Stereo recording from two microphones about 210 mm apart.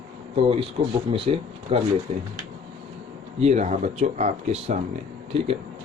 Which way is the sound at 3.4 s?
35° right (ahead or behind).